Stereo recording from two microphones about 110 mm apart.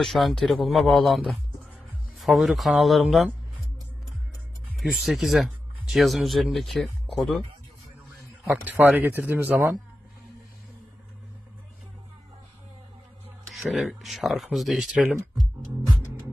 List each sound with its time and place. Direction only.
0.0 s speech: centre (ahead or behind)
4.7 s speech: centre (ahead or behind)
8.6 s speech: 15° right (ahead or behind)
13.5 s speech: centre (ahead or behind)